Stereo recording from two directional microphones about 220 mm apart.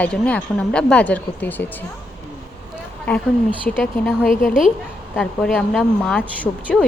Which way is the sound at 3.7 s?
Centre (ahead or behind).